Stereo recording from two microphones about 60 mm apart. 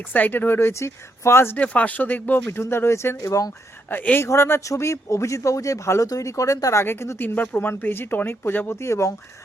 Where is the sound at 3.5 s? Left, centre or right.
Left.